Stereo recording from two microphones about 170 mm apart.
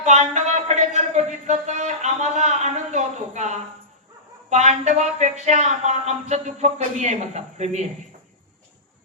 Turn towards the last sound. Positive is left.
turn(degrees=-40)  # may be behind; listen again after turning